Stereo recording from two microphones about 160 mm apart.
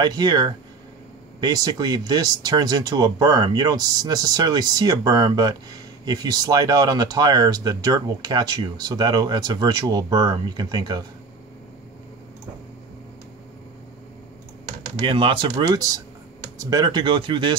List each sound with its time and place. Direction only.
0.0 s speech: 25° right (ahead or behind)
15.0 s speech: 35° right (ahead or behind)